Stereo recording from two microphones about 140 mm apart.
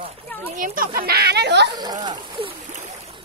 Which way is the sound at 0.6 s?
80° right.